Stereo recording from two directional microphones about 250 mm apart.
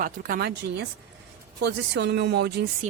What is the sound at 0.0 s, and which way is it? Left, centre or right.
A woman's voice, right.